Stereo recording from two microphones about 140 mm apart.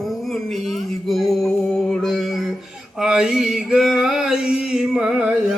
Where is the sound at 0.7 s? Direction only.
Centre (ahead or behind).